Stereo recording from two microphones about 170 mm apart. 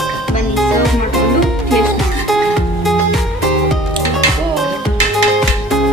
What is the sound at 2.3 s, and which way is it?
Music, centre (ahead or behind).